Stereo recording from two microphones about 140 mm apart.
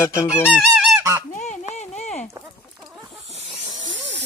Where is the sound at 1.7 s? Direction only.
55° left (ahead or behind).